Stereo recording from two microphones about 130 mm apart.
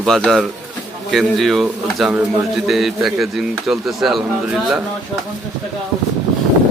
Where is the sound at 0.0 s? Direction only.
5° left (ahead or behind).